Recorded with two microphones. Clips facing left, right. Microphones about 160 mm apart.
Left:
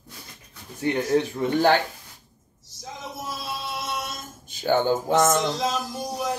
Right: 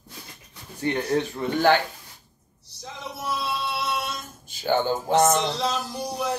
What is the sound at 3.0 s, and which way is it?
Music, 75° right (ahead or behind).